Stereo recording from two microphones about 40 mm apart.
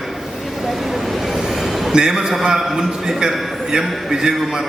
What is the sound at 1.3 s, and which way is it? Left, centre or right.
Train, centre.